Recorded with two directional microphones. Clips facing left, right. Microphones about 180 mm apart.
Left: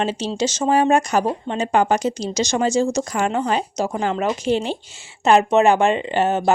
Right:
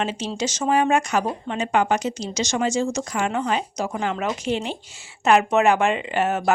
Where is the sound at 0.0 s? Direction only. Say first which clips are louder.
Left 4 dB; 30° left (ahead or behind).